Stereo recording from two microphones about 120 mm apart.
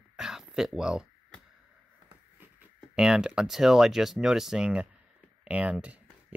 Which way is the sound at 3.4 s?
5° right (ahead or behind).